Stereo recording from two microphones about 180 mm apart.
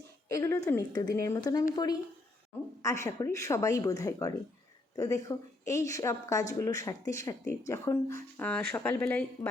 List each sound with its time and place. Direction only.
0.3 s a woman's voice: 15° left (ahead or behind)